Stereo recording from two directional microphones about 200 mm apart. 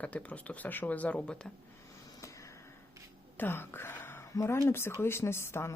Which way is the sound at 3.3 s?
10° left (ahead or behind).